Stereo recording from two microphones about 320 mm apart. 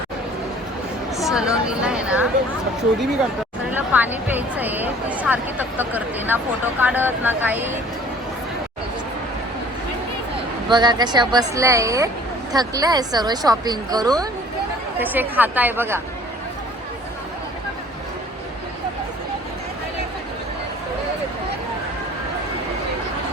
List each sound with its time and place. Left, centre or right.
1.1 s speech: centre
3.7 s speech: centre
10.7 s speech: centre